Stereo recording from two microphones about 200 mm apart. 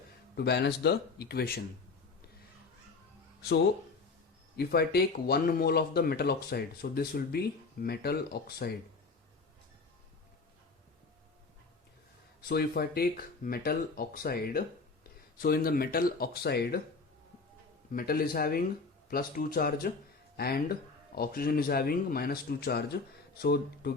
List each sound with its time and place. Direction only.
0.3 s speech: 55° left (ahead or behind)
4.5 s speech: 50° left (ahead or behind)
12.4 s speech: 50° left (ahead or behind)
17.9 s speech: 50° left (ahead or behind)